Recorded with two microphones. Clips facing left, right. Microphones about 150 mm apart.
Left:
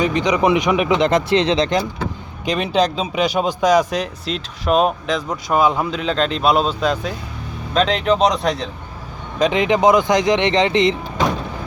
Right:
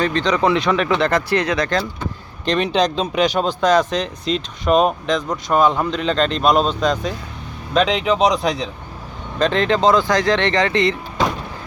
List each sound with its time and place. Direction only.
0.0 s speech: 15° left (ahead or behind)
2.4 s speech: 5° left (ahead or behind)
9.4 s speech: 15° left (ahead or behind)